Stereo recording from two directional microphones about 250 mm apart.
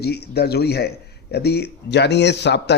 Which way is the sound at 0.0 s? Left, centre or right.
Left.